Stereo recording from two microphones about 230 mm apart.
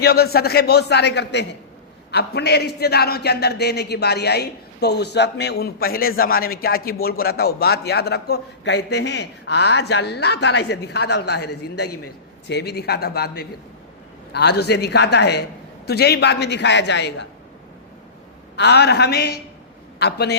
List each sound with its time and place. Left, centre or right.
0.0 s a man's voice: left
18.5 s a man's voice: left